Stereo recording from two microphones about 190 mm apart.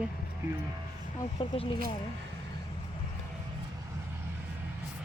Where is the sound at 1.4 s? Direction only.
30° left (ahead or behind).